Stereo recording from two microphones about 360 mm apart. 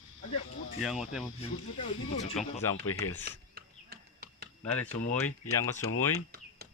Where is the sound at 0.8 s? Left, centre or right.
Centre.